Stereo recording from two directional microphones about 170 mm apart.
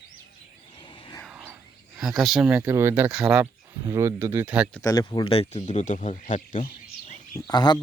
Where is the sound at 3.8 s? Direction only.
20° right (ahead or behind).